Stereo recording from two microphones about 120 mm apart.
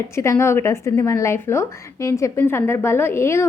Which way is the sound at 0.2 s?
25° left (ahead or behind).